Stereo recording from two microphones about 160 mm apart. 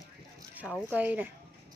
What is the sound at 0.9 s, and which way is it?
Speech, 10° right (ahead or behind).